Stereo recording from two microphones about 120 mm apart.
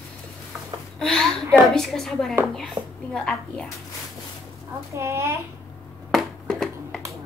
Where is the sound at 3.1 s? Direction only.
5° left (ahead or behind).